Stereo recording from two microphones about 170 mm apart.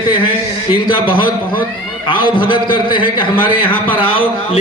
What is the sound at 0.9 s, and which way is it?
A man's voice, 30° left (ahead or behind).